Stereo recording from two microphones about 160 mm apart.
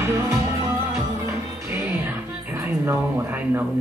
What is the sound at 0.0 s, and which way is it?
Music, 15° right (ahead or behind).